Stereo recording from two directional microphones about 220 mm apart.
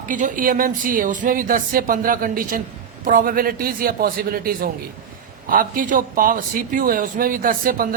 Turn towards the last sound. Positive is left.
turn(degrees=-40)  # may be behind; listen again after turning